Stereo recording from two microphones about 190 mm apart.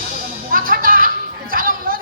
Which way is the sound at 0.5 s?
50° right (ahead or behind).